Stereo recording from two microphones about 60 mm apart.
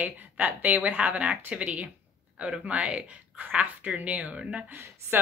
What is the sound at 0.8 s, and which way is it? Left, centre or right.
A woman's voice, right.